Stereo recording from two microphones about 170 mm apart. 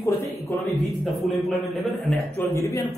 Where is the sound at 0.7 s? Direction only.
Centre (ahead or behind).